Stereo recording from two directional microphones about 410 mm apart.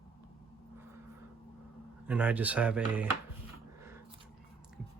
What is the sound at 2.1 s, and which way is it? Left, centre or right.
Speech, centre.